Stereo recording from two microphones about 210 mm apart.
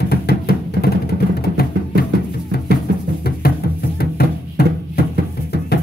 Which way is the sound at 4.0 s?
45° left (ahead or behind).